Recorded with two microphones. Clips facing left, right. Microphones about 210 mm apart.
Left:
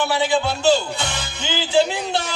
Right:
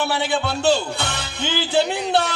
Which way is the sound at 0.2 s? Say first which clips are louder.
Left 2 dB; 60° right (ahead or behind).